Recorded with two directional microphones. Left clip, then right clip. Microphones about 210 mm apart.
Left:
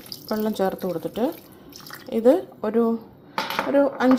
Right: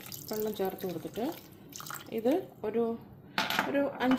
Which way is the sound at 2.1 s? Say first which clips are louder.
Left 12 dB; 20° left (ahead or behind).